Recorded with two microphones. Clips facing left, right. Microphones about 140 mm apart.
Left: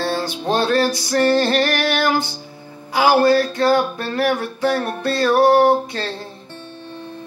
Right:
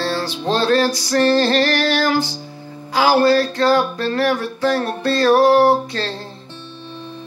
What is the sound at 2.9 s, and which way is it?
Music, 20° left (ahead or behind).